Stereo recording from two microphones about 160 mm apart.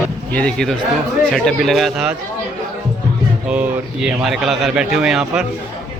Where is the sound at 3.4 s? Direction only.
10° right (ahead or behind).